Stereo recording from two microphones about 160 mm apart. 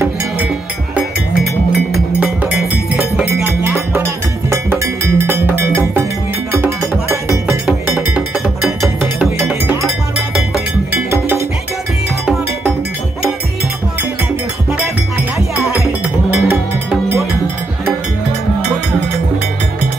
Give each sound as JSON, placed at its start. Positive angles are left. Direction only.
{"t": 2.1, "sound": "music", "side_deg": -10}
{"t": 9.0, "sound": "cowbell", "side_deg": -10}
{"t": 11.1, "sound": "music", "side_deg": -15}
{"t": 15.7, "sound": "music", "side_deg": -10}